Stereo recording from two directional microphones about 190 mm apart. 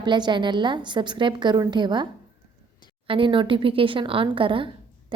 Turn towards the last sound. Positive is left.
turn(degrees=-25)  # may be behind; listen again after turning